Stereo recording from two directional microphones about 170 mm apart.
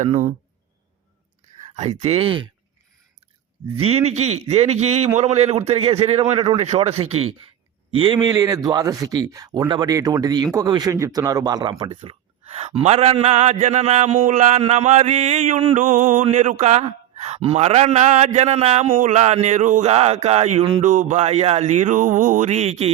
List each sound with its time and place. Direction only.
0.0 s speech: 45° right (ahead or behind)
1.7 s speech: 40° right (ahead or behind)
3.8 s speech: 40° right (ahead or behind)
20.8 s speech: 45° right (ahead or behind)